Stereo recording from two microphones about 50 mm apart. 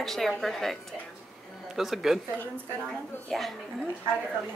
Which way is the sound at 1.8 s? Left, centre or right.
Centre.